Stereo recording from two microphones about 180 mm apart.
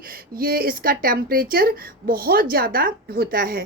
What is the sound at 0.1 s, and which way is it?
Speech, 55° right (ahead or behind).